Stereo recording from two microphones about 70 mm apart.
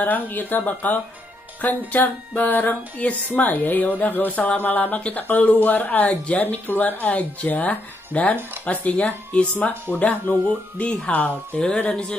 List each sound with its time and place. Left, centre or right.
0.0 s speech: left